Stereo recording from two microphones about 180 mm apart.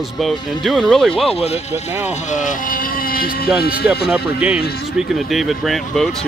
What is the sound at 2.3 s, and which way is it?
Speech, 45° left (ahead or behind).